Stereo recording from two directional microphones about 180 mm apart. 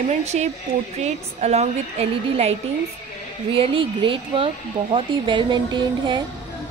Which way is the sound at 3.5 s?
30° right (ahead or behind).